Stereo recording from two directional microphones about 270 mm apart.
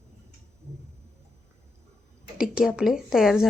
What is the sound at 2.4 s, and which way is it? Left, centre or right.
A woman's voice, centre.